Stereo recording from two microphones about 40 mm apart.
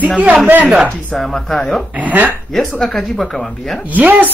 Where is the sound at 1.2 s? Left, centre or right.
Centre.